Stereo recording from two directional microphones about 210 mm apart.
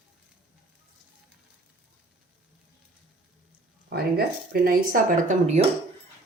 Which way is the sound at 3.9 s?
45° right (ahead or behind).